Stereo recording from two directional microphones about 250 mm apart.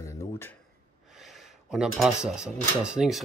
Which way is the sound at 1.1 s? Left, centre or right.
Centre.